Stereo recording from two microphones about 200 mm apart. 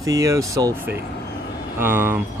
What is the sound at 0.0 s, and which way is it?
Speech, 15° right (ahead or behind).